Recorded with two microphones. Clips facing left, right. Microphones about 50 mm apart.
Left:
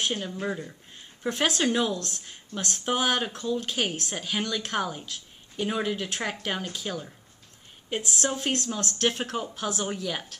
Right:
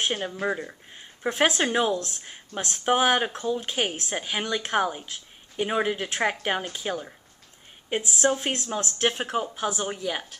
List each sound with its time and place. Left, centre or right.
0.0 s a woman's voice: right
8.2 s a woman's voice: centre